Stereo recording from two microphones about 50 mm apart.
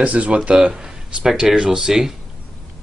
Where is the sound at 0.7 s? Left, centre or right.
Centre.